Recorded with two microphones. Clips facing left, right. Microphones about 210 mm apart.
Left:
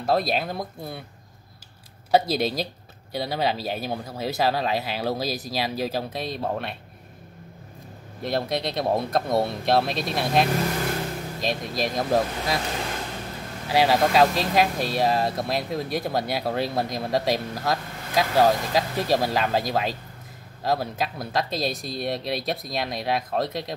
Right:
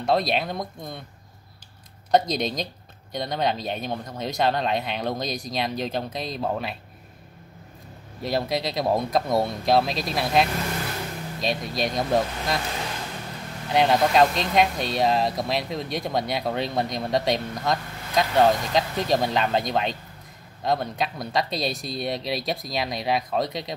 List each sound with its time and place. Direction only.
0.0 s speech: centre (ahead or behind)
2.0 s speech: 5° left (ahead or behind)
8.2 s speech: centre (ahead or behind)
13.7 s speech: 5° left (ahead or behind)